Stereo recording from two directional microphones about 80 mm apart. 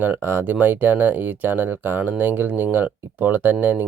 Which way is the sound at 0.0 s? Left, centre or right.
Right.